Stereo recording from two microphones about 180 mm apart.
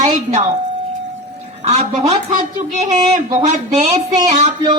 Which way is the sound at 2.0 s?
45° right (ahead or behind).